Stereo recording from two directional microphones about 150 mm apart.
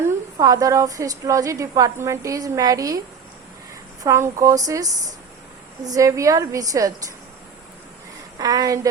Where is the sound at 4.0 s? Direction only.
20° right (ahead or behind).